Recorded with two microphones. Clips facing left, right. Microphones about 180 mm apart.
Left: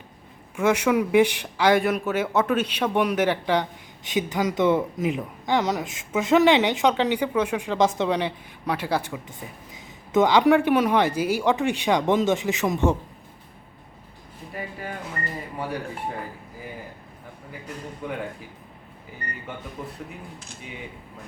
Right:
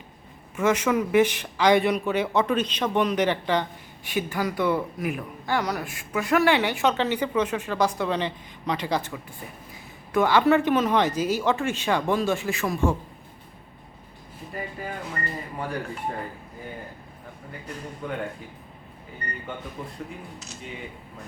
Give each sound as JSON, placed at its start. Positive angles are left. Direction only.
{"t": 0.5, "sound": "a man's voice", "side_deg": 10}
{"t": 15.5, "sound": "a man's voice", "side_deg": 5}